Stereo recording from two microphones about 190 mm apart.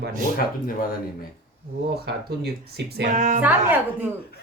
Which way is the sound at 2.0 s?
60° right (ahead or behind).